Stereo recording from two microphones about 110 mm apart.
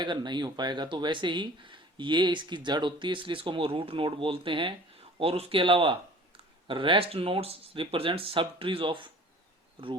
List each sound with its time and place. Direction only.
0.0 s speech: 45° right (ahead or behind)